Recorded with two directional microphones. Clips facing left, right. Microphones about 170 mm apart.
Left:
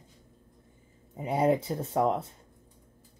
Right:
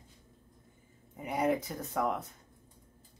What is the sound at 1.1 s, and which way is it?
Speech, 30° left (ahead or behind).